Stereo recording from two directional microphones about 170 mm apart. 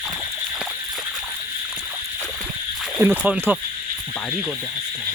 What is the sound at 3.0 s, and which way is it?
Speech, 15° right (ahead or behind).